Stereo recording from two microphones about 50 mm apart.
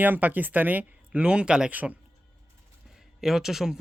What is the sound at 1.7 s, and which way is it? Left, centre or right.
Speech, right.